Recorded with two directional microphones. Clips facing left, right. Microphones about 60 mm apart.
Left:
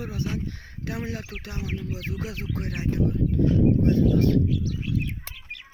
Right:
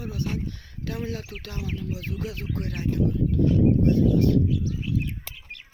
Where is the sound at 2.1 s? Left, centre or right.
Left.